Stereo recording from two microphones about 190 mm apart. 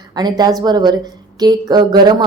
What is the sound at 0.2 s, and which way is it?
Speech, 20° right (ahead or behind).